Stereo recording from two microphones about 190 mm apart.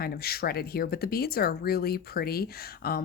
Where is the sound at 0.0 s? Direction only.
55° left (ahead or behind).